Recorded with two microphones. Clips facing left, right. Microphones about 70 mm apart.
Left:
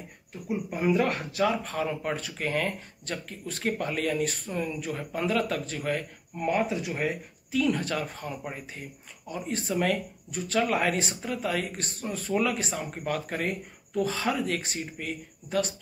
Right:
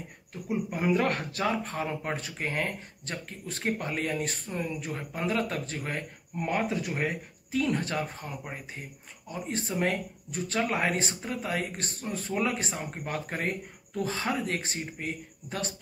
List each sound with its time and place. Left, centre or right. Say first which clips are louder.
0.7 s speech: left 2 dB; right